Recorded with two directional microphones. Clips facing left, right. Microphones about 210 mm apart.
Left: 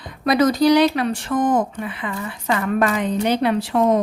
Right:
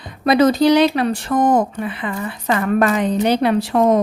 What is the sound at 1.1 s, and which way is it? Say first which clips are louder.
A woman's voice: right 3 dB; 40° right (ahead or behind).